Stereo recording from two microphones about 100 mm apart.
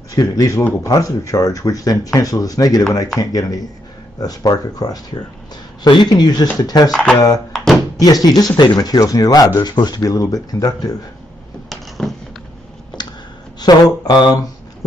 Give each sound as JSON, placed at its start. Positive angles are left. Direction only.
{"t": 0.1, "sound": "a man's voice", "side_deg": 40}
{"t": 6.0, "sound": "a man's voice", "side_deg": 45}
{"t": 6.9, "sound": "speech", "side_deg": 5}
{"t": 7.2, "sound": "a man's voice", "side_deg": 40}
{"t": 7.5, "sound": "a sound", "side_deg": 0}
{"t": 8.0, "sound": "a man's voice", "side_deg": 40}
{"t": 12.0, "sound": "a sound", "side_deg": 10}
{"t": 13.0, "sound": "a sound", "side_deg": 45}
{"t": 13.7, "sound": "speech", "side_deg": 45}